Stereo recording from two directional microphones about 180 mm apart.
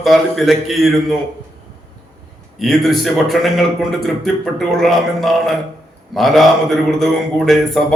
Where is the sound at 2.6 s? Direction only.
Centre (ahead or behind).